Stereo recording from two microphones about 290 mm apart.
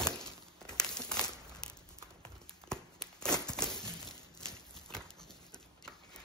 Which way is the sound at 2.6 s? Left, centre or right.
Centre.